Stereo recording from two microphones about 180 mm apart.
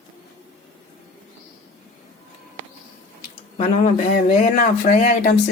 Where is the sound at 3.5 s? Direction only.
35° left (ahead or behind).